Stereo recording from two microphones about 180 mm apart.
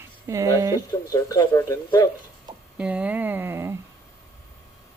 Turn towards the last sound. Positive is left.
turn(degrees=-15)  # may be behind; listen again after turning